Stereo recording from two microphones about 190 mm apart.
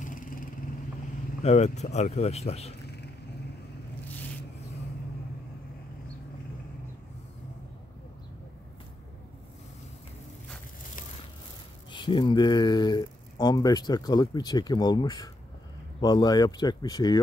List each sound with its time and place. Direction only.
0.0 s vehicle: 45° left (ahead or behind)
1.4 s speech: 35° left (ahead or behind)
11.9 s speech: 25° left (ahead or behind)